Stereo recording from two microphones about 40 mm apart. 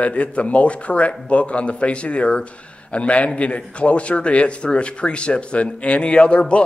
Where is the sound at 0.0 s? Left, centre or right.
Left.